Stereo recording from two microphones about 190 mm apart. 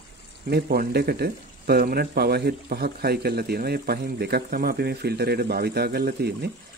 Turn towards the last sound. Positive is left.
turn(degrees=-55)  # may be behind; listen again after turning